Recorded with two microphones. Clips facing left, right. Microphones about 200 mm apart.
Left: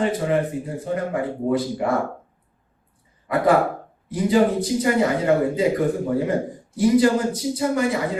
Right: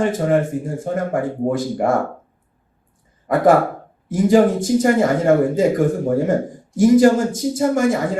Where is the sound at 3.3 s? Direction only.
45° right (ahead or behind).